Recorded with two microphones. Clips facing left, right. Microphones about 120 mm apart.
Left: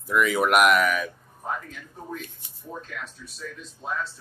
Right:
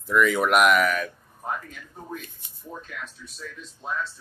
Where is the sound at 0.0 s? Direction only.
5° left (ahead or behind).